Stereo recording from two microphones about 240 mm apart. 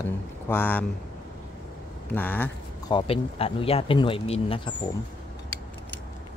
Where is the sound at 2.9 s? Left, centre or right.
Left.